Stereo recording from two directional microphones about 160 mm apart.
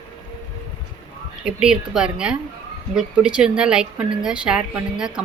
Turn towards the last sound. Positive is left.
turn(degrees=-5)  # may be behind; listen again after turning